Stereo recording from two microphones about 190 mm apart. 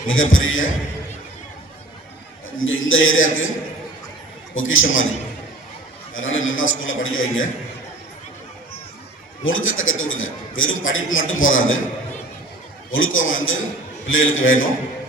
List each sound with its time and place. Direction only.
0.1 s a man's voice: 90° left
2.6 s a man's voice: 90° left
4.5 s a man's voice: 90° left
6.1 s a man's voice: 90° left
9.4 s a man's voice: 90° left
12.9 s a man's voice: 90° left